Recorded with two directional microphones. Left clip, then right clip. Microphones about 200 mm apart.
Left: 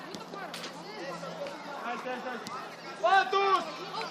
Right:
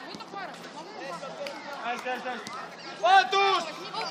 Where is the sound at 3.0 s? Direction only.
35° right (ahead or behind).